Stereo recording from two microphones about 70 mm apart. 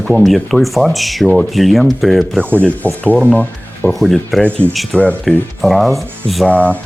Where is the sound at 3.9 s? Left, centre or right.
Centre.